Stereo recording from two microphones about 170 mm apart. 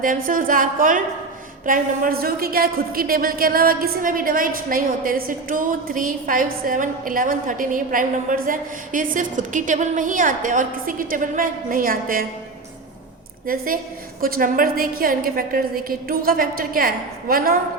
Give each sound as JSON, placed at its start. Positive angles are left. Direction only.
{"t": 0.0, "sound": "a woman's voice", "side_deg": -55}
{"t": 13.5, "sound": "a woman's voice", "side_deg": -60}